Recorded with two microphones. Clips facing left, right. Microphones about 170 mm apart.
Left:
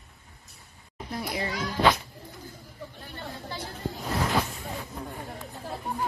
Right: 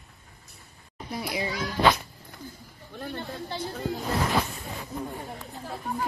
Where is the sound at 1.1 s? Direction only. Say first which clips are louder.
Right 1 dB; 5° right (ahead or behind).